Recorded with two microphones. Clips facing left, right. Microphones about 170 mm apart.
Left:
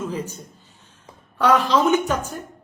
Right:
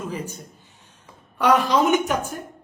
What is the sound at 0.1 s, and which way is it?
A man's voice, 10° right (ahead or behind).